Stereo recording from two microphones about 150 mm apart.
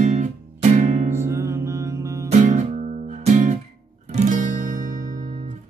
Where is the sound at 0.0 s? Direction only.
50° right (ahead or behind).